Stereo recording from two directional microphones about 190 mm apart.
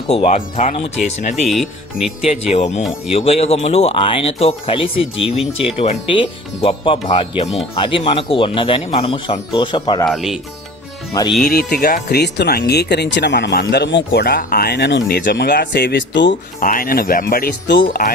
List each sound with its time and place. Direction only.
0.1 s speech: 35° left (ahead or behind)
1.5 s speech: centre (ahead or behind)
2.5 s speech: 35° left (ahead or behind)
10.1 s speech: centre (ahead or behind)
11.4 s speech: 55° left (ahead or behind); by 16.3 s 70° left (ahead or behind)
16.6 s speech: 45° left (ahead or behind)